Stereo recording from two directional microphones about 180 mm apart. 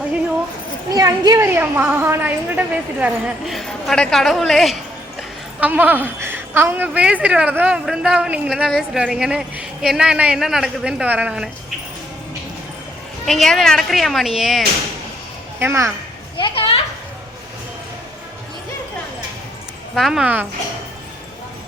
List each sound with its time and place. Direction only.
0.9 s a woman's voice: 20° right (ahead or behind); by 11.4 s 5° right (ahead or behind)
13.2 s a woman's voice: centre (ahead or behind)
15.5 s speech: 15° right (ahead or behind)
16.4 s children playing: 30° left (ahead or behind)
20.0 s a woman's voice: centre (ahead or behind)